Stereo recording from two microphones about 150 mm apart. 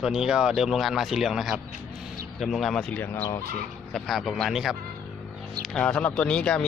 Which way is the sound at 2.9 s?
15° left (ahead or behind).